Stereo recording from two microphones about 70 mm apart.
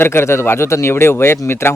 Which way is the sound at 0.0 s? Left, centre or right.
Left.